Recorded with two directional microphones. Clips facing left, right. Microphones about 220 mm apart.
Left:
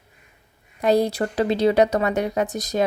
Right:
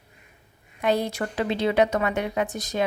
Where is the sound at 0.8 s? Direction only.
40° left (ahead or behind).